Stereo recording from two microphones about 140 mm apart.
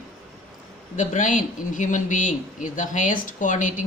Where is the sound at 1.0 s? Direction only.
65° left (ahead or behind).